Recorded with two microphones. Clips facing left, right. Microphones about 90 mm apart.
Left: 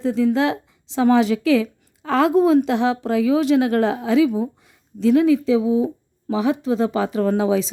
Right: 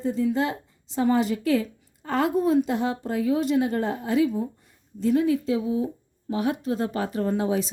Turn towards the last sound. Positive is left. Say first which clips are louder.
# left 6 dB
turn(degrees=90)